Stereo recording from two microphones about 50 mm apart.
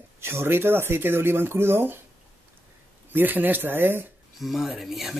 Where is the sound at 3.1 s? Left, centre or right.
Right.